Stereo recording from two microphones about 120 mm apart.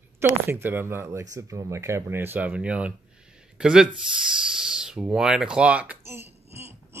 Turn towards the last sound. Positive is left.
turn(degrees=-20)  # may be behind; listen again after turning